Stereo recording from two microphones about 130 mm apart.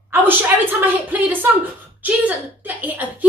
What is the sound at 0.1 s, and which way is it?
A woman's voice, 15° right (ahead or behind).